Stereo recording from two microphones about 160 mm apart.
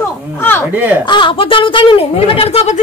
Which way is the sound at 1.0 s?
30° left (ahead or behind).